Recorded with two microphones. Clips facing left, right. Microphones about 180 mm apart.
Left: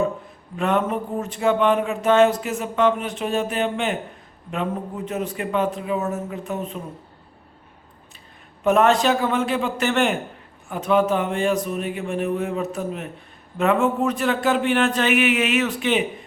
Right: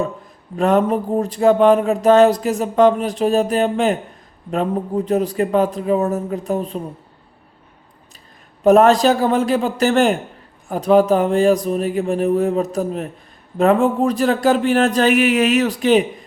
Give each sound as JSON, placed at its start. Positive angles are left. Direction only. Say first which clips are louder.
{"t": 0.5, "sound": "speech", "louder": "right 6 dB", "side_deg": -35}
{"t": 8.6, "sound": "speech", "louder": "right 6 dB", "side_deg": -35}